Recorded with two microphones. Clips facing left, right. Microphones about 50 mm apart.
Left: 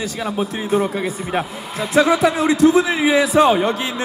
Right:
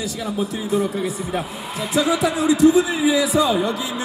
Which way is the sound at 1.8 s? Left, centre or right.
Left.